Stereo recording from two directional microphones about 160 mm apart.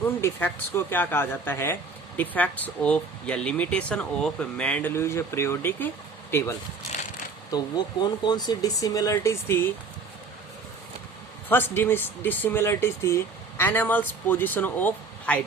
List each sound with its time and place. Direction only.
0.0 s speech: 15° left (ahead or behind)
7.5 s speech: 25° left (ahead or behind)
11.4 s speech: 15° left (ahead or behind)